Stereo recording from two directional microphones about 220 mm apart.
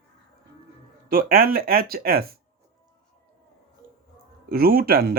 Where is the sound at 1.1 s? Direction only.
45° right (ahead or behind).